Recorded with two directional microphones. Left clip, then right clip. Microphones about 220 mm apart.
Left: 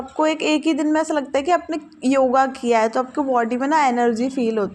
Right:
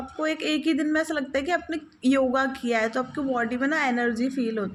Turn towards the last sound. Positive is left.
turn(degrees=20)  # may be behind; listen again after turning